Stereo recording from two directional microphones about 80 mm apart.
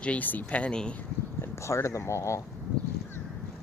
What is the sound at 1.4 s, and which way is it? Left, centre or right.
Speech, left.